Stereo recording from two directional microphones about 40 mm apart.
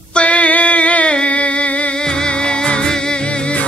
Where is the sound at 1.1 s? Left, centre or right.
Left.